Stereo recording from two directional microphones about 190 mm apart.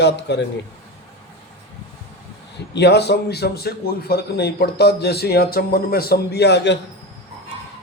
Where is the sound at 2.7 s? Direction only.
60° left (ahead or behind).